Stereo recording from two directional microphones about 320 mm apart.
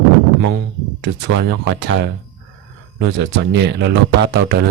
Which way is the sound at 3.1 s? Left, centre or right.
Right.